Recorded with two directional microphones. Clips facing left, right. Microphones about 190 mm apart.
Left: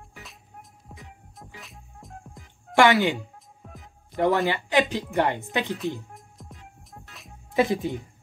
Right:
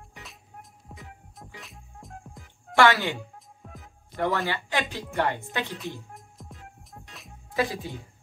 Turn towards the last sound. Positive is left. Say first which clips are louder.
# left 5 dB
turn(degrees=20)  # may be behind; listen again after turning